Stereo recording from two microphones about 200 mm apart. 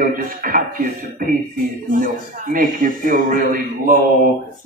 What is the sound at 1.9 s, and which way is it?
A man's voice, 40° right (ahead or behind).